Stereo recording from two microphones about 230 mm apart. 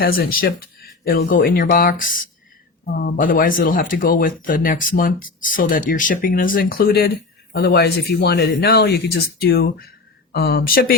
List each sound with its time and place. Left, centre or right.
0.0 s speech: left